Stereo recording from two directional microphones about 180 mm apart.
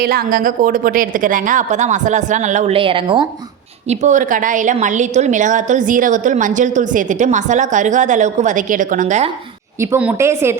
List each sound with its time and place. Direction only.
0.0 s a woman's voice: 55° right (ahead or behind); by 3.2 s 30° right (ahead or behind)
3.8 s a woman's voice: 45° right (ahead or behind)
9.8 s a woman's voice: 10° right (ahead or behind)